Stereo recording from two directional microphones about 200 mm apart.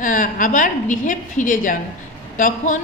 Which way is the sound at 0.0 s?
40° left (ahead or behind).